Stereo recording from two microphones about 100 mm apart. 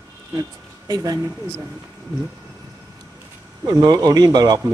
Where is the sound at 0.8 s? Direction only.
40° right (ahead or behind).